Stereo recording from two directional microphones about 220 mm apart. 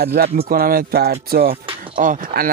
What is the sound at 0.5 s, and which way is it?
Speech, 40° right (ahead or behind).